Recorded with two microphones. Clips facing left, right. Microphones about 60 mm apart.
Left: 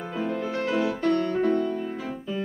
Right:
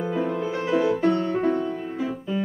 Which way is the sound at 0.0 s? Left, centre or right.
Centre.